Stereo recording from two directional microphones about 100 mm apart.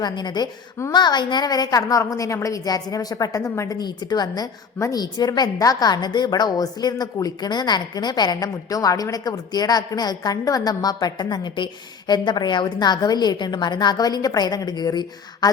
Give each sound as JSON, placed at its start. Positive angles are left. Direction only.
{"t": 0.0, "sound": "a woman's voice", "side_deg": 45}
{"t": 3.8, "sound": "a woman's voice", "side_deg": 45}